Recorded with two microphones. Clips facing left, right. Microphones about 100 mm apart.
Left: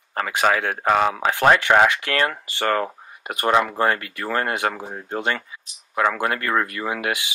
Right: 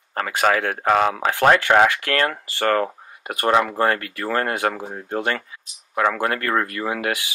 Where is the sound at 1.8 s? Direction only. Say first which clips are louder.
Right 1 dB; 20° left (ahead or behind).